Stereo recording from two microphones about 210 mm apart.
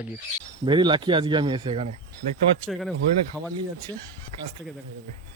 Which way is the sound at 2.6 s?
Centre (ahead or behind).